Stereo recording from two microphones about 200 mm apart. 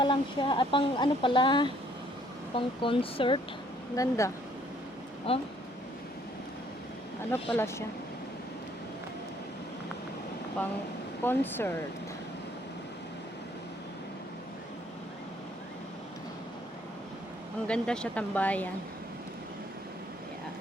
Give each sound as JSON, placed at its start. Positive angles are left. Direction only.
{"t": 0.0, "sound": "speech", "side_deg": 25}
{"t": 5.3, "sound": "speech", "side_deg": 30}
{"t": 7.5, "sound": "speech", "side_deg": 10}
{"t": 11.2, "sound": "speech", "side_deg": 10}
{"t": 17.7, "sound": "speech", "side_deg": 5}